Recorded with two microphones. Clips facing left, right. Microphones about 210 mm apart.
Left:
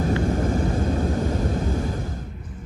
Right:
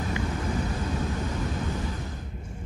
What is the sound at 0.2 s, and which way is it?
Vehicle, 45° left (ahead or behind).